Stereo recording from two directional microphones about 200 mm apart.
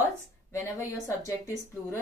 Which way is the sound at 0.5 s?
15° left (ahead or behind).